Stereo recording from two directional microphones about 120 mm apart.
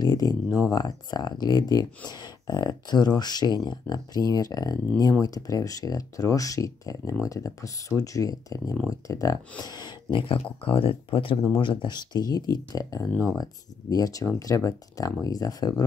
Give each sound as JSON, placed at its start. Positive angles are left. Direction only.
{"t": 0.0, "sound": "speech", "side_deg": 35}